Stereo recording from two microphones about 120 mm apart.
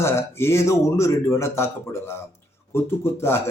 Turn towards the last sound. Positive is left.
turn(degrees=20)  # may be behind; listen again after turning